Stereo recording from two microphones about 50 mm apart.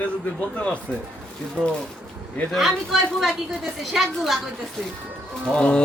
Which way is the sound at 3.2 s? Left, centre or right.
Centre.